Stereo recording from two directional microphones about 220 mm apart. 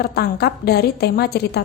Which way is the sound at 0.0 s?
45° left (ahead or behind).